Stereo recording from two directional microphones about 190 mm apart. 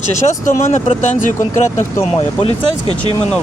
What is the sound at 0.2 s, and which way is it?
Speech, 40° left (ahead or behind).